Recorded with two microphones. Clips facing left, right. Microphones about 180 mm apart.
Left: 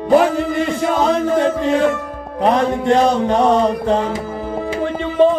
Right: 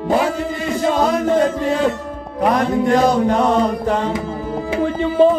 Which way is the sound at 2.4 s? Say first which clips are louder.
Even; 25° left (ahead or behind).